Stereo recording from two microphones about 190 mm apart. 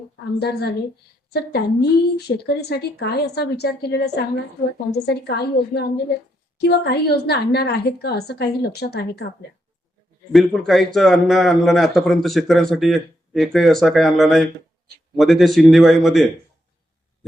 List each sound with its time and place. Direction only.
0.3 s speech: 60° left (ahead or behind)
10.3 s a man's voice: centre (ahead or behind)